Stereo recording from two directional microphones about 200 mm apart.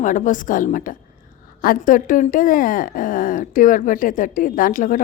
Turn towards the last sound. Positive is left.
turn(degrees=40)  # may be behind; listen again after turning